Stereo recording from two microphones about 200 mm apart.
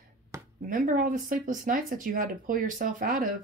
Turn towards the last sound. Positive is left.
turn(degrees=-45)  # may be behind; listen again after turning